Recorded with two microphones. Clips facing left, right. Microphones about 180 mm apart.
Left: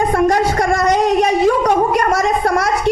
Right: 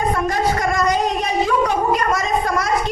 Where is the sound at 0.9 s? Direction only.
70° left (ahead or behind).